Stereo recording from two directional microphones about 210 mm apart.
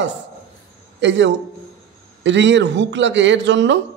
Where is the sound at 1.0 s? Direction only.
60° right (ahead or behind).